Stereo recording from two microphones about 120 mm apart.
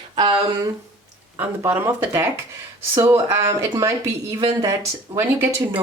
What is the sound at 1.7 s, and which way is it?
Speech, 15° right (ahead or behind).